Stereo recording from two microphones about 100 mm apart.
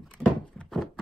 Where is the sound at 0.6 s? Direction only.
5° left (ahead or behind).